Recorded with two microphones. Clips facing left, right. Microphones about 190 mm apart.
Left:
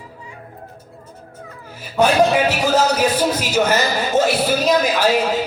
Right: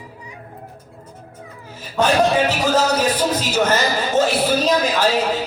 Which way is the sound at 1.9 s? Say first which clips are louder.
Left 2 dB; 10° left (ahead or behind).